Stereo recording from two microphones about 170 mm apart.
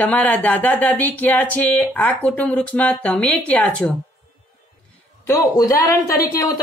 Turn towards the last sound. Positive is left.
turn(degrees=20)  # may be behind; listen again after turning